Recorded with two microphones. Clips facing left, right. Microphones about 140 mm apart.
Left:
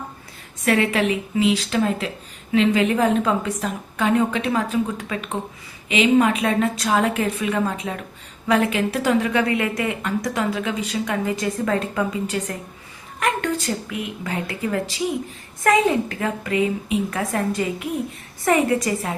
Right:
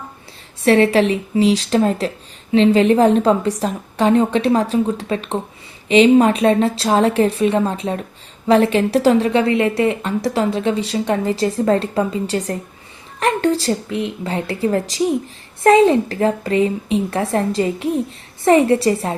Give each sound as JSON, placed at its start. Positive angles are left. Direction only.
{"t": 0.6, "sound": "a woman's voice", "side_deg": -30}